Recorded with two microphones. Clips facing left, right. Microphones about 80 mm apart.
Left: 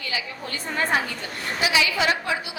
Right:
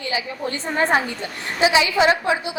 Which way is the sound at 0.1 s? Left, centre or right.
Right.